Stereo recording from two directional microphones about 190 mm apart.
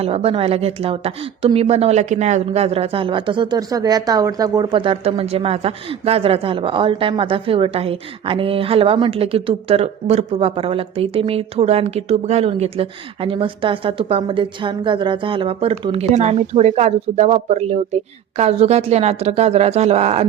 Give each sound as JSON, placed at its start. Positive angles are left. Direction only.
{"t": 0.0, "sound": "speech", "side_deg": -30}